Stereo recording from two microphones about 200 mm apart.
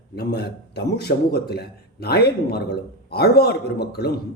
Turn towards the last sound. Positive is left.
turn(degrees=55)  # may be behind; listen again after turning